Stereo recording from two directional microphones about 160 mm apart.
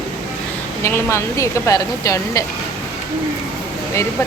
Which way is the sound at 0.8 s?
15° left (ahead or behind).